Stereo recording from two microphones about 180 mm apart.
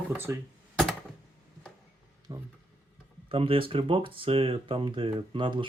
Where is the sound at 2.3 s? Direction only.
25° right (ahead or behind).